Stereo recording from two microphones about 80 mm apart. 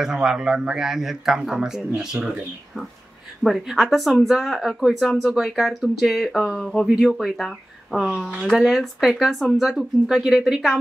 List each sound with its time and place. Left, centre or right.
0.0 s speech: centre
3.4 s speech: centre